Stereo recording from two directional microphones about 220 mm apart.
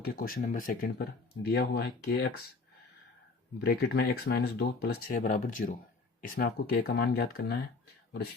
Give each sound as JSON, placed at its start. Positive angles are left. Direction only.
{"t": 0.0, "sound": "speech", "side_deg": 40}
{"t": 3.6, "sound": "speech", "side_deg": 45}